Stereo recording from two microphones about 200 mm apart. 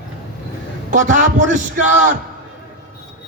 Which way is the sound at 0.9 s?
40° right (ahead or behind).